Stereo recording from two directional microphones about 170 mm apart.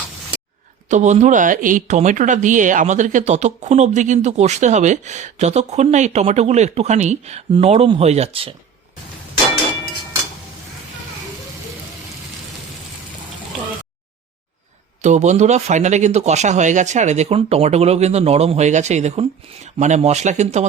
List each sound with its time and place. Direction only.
0.9 s speech: 45° right (ahead or behind)
15.0 s speech: 45° right (ahead or behind)